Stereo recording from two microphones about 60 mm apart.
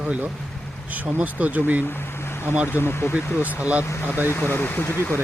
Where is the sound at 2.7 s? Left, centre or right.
Left.